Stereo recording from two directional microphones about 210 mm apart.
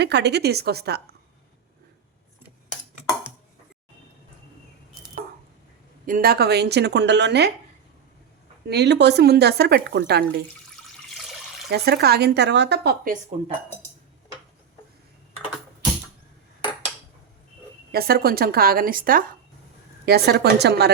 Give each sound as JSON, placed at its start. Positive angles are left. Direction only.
{"t": 0.0, "sound": "speech", "side_deg": -55}
{"t": 6.1, "sound": "speech", "side_deg": -45}
{"t": 8.6, "sound": "speech", "side_deg": -55}
{"t": 11.7, "sound": "speech", "side_deg": -50}
{"t": 17.9, "sound": "speech", "side_deg": -45}